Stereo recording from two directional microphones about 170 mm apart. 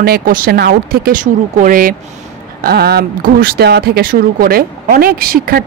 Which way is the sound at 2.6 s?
70° right (ahead or behind).